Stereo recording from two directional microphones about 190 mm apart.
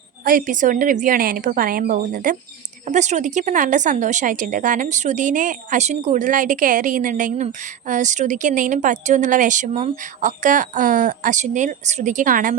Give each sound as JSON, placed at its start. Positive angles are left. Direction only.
{"t": 0.3, "sound": "a woman's voice", "side_deg": -45}